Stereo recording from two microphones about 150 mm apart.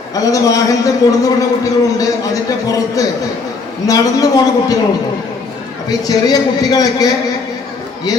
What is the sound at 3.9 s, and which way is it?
Speech, 25° left (ahead or behind).